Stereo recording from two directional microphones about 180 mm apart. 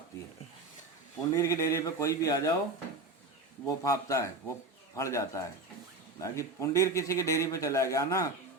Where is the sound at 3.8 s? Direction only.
15° left (ahead or behind).